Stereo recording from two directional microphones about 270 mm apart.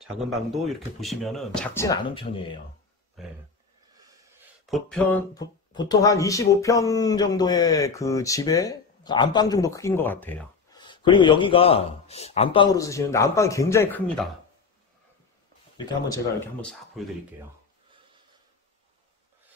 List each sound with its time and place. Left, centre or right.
0.5 s speech: centre
3.2 s speech: centre
4.6 s speech: centre
15.8 s speech: centre
17.0 s speech: centre